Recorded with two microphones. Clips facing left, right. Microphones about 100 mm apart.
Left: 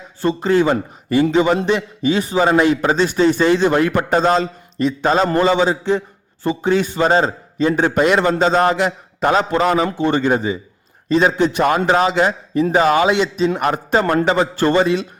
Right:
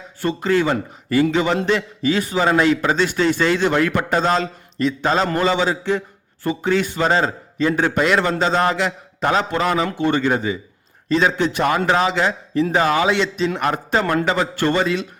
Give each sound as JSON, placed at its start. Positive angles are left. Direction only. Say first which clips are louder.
{"t": 0.2, "sound": "a man's voice", "louder": "left 3 dB", "side_deg": 25}
{"t": 5.1, "sound": "a man's voice", "louder": "left 5 dB", "side_deg": 35}
{"t": 14.0, "sound": "a man's voice", "louder": "left 4 dB", "side_deg": 30}